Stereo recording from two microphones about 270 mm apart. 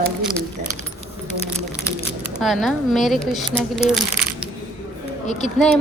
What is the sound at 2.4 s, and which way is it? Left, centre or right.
Speech, centre.